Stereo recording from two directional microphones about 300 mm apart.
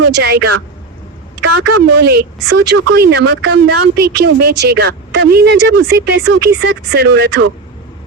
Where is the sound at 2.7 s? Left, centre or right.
Right.